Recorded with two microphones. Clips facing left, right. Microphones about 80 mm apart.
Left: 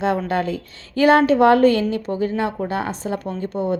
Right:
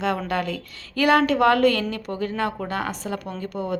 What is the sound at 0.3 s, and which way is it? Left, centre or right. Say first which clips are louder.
A woman's voice: left 4 dB; left.